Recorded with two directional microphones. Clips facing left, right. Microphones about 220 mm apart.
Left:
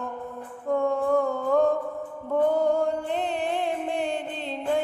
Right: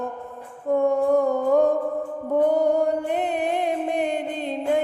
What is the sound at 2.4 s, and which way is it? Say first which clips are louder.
Music: right 2 dB; 15° right (ahead or behind).